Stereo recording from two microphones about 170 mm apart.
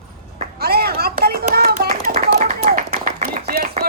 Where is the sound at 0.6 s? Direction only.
65° right (ahead or behind).